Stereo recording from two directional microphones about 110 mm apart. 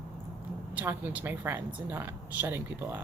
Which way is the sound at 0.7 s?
15° right (ahead or behind).